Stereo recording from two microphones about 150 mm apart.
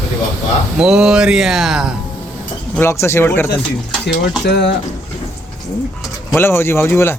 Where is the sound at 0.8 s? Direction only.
5° right (ahead or behind).